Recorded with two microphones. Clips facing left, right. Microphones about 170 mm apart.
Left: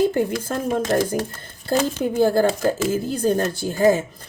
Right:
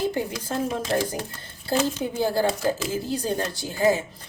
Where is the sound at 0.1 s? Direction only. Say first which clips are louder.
Left 6 dB; 55° left (ahead or behind).